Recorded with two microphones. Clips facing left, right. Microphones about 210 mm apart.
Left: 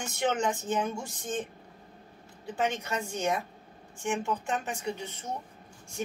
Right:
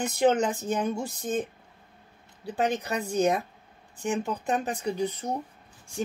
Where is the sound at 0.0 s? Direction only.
35° right (ahead or behind).